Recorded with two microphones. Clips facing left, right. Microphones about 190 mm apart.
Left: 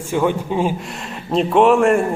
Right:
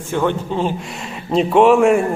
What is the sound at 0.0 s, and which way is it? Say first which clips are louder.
A man's voice: left 1 dB; 10° left (ahead or behind).